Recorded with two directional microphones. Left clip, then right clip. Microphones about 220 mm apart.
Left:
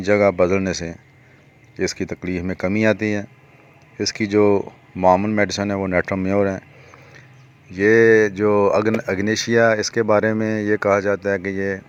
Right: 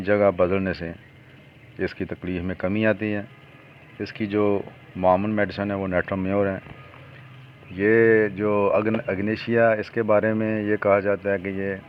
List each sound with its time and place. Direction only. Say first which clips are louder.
0.1 s speech: left 4 dB; 25° left (ahead or behind)
7.9 s speech: left 4 dB; 20° left (ahead or behind)